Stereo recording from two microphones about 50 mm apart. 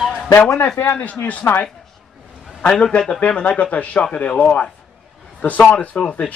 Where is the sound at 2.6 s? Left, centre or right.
Centre.